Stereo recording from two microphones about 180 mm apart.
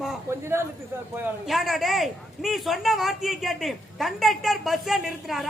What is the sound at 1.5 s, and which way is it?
A man's voice, centre (ahead or behind).